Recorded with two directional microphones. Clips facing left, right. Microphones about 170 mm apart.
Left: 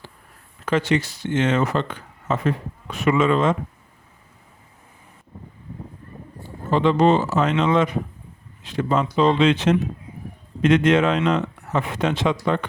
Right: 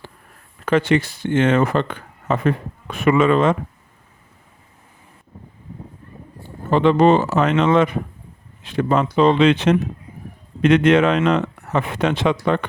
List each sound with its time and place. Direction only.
0.6 s speech: 55° right (ahead or behind)
6.7 s speech: 60° right (ahead or behind)